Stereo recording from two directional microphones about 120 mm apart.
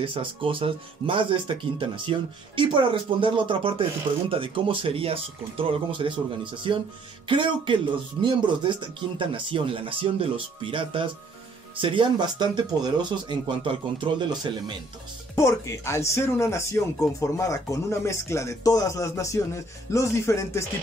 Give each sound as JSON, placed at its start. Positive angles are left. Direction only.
{"t": 0.0, "sound": "speech", "side_deg": -45}
{"t": 15.3, "sound": "speech", "side_deg": 25}